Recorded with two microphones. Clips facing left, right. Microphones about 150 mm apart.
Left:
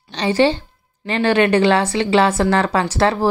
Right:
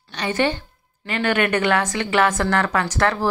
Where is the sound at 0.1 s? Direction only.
30° left (ahead or behind).